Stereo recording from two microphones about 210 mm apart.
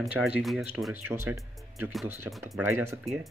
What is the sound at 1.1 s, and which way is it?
Speech, 10° right (ahead or behind).